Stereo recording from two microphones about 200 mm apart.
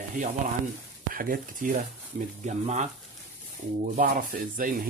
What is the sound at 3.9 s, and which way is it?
Speech, 45° right (ahead or behind).